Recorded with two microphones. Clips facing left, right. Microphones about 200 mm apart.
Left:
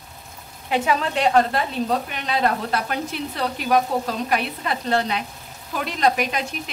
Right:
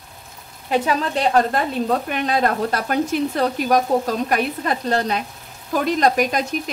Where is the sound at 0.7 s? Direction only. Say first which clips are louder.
Right 2 dB; 35° right (ahead or behind).